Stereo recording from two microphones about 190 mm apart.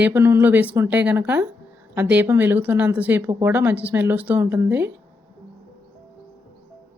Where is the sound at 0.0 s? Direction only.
10° right (ahead or behind).